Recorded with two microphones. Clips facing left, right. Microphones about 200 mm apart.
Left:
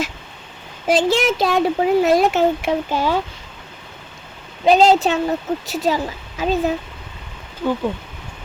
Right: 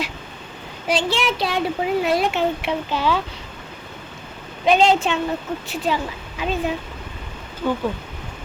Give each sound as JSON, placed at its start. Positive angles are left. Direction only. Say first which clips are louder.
{"t": 0.9, "sound": "speech", "louder": "left 5 dB", "side_deg": 45}
{"t": 4.6, "sound": "a woman's voice", "louder": "left 3 dB", "side_deg": 35}
{"t": 7.6, "sound": "speech", "louder": "left 2 dB", "side_deg": 5}